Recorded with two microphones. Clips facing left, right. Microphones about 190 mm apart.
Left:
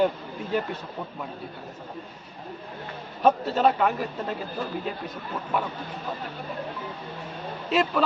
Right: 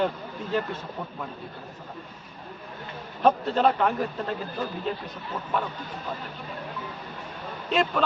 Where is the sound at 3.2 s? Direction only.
5° left (ahead or behind).